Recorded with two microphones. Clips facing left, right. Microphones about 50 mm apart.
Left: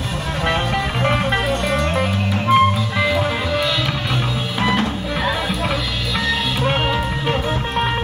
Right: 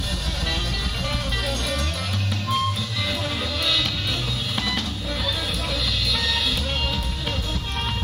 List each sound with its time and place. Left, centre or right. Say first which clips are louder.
1.0 s music: left 10 dB; left